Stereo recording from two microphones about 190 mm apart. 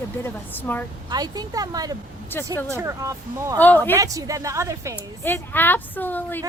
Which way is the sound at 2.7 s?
15° right (ahead or behind).